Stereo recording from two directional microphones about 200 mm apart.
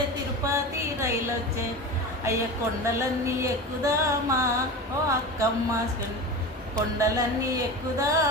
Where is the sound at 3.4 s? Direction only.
15° right (ahead or behind).